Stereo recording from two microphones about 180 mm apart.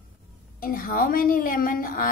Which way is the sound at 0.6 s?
50° left (ahead or behind).